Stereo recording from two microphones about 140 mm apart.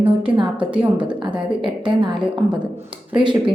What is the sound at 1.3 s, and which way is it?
A woman's voice, 35° right (ahead or behind).